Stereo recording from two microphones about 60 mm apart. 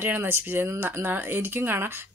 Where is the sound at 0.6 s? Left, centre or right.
Right.